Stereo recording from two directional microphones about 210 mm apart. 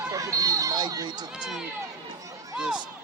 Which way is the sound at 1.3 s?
5° right (ahead or behind).